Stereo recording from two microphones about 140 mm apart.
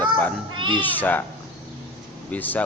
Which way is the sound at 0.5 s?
35° right (ahead or behind).